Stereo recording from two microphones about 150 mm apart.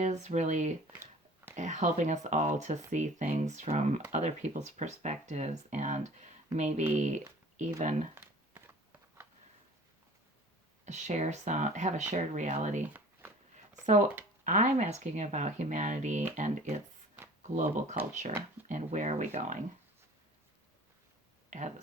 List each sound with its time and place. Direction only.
0.0 s speech: 50° right (ahead or behind)
8.1 s a sound: 15° right (ahead or behind)
10.8 s speech: 50° right (ahead or behind)
14.4 s speech: 55° right (ahead or behind)
21.5 s speech: 55° right (ahead or behind)